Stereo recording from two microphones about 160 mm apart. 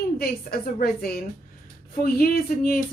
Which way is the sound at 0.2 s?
70° left (ahead or behind).